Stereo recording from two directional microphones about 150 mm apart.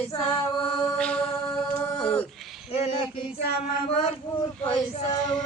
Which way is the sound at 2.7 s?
45° left (ahead or behind).